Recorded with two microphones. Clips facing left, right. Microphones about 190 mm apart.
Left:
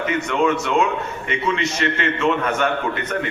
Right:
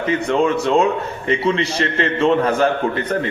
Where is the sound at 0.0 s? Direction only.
35° right (ahead or behind).